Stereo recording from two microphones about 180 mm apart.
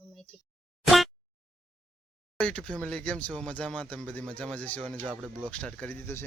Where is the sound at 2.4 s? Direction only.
5° left (ahead or behind).